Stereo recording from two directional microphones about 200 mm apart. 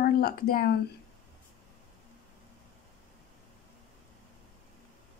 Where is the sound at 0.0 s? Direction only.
50° left (ahead or behind).